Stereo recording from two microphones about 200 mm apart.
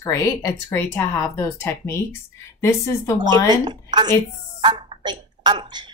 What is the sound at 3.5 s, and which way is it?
A woman's voice, 20° right (ahead or behind).